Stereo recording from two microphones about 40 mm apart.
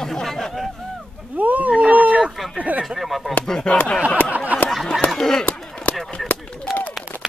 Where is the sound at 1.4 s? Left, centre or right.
Right.